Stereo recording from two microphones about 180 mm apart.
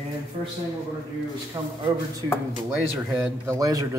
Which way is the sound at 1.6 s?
20° right (ahead or behind).